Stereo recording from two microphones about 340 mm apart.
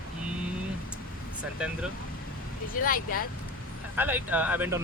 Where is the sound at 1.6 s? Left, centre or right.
Centre.